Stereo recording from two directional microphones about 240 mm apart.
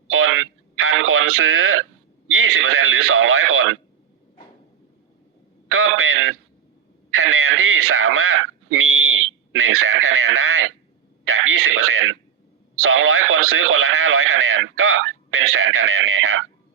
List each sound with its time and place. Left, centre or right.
0.1 s speech: right
5.6 s radio: right